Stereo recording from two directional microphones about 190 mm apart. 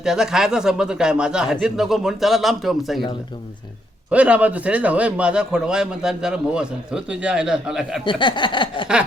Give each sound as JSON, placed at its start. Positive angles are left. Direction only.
{"t": 0.0, "sound": "a man's voice", "side_deg": -5}
{"t": 4.1, "sound": "a man's voice", "side_deg": -5}
{"t": 8.0, "sound": "a sound", "side_deg": 25}